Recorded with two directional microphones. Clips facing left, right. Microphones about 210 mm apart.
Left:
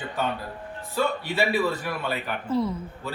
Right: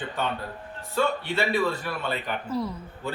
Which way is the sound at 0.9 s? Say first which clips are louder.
Even; 5° left (ahead or behind).